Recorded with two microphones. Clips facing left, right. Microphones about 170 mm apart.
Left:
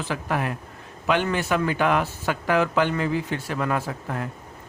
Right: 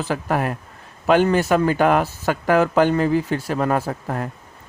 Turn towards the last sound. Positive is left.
turn(degrees=-40)  # may be behind; listen again after turning